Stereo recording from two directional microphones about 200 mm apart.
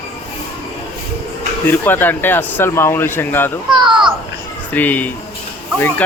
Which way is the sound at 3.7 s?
20° right (ahead or behind).